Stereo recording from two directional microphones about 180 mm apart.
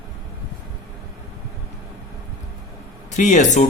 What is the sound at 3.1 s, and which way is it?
Speech, 40° left (ahead or behind).